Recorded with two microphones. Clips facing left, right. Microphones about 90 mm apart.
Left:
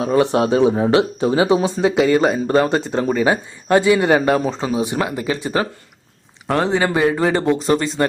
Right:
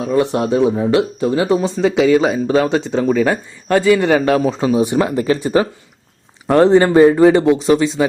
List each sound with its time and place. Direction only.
0.0 s speech: centre (ahead or behind)